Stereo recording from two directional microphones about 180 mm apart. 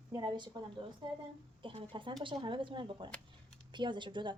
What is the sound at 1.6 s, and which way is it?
A woman's voice, 30° right (ahead or behind).